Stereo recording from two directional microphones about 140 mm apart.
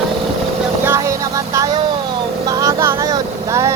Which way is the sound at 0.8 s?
20° right (ahead or behind).